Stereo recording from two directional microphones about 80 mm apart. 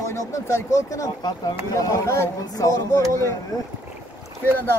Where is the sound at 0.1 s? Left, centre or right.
Left.